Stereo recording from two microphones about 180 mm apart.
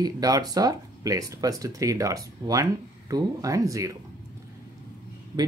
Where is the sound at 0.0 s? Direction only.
20° right (ahead or behind).